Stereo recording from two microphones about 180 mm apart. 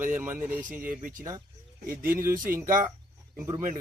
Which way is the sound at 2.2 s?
20° right (ahead or behind).